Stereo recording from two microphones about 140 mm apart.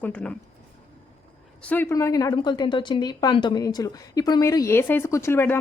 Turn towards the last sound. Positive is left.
turn(degrees=15)  # may be behind; listen again after turning